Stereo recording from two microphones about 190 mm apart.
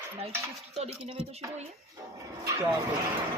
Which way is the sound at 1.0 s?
35° right (ahead or behind).